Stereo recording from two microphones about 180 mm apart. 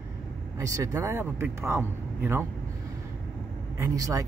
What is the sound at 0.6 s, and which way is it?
Speech, 15° right (ahead or behind).